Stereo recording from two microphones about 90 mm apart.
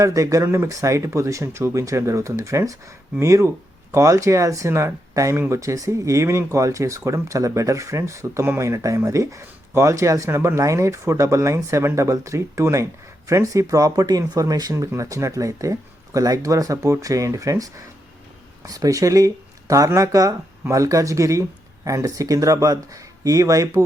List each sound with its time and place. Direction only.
0.0 s speech: 40° right (ahead or behind)